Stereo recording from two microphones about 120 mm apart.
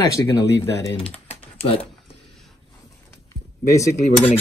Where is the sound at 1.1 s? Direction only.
55° left (ahead or behind).